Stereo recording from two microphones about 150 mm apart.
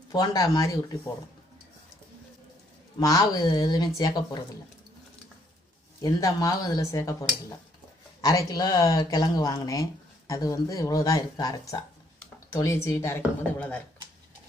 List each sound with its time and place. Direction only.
0.1 s speech: 25° left (ahead or behind)
3.0 s speech: 25° left (ahead or behind)
6.0 s speech: 25° left (ahead or behind)